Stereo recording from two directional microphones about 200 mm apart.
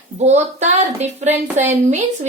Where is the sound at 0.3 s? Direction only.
35° right (ahead or behind).